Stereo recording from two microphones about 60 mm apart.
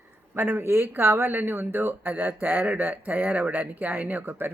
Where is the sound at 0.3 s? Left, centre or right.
Right.